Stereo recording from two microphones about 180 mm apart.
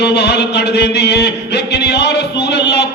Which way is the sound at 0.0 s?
65° left (ahead or behind).